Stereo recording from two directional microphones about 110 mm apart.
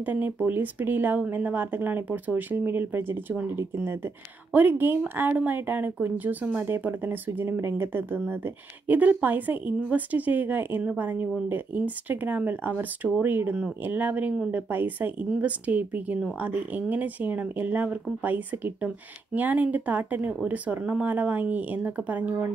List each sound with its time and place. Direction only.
0.0 s speech: 15° right (ahead or behind)